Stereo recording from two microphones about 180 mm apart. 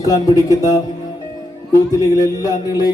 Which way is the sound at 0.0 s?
20° left (ahead or behind).